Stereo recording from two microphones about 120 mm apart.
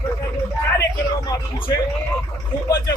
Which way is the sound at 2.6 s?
35° left (ahead or behind).